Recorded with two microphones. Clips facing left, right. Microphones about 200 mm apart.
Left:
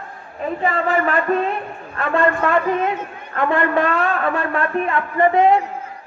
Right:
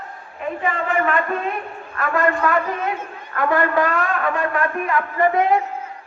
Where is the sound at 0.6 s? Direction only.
35° left (ahead or behind).